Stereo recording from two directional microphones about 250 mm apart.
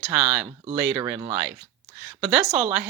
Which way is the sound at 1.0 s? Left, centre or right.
Centre.